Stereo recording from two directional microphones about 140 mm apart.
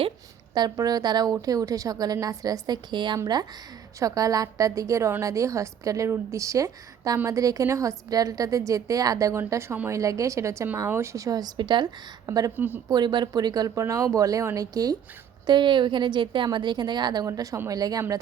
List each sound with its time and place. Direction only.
0.5 s a woman's voice: 30° right (ahead or behind)
12.5 s speech: 15° right (ahead or behind)
12.9 s a woman's voice: 30° right (ahead or behind)